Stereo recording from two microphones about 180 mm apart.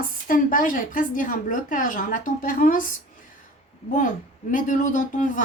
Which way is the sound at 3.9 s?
45° left (ahead or behind).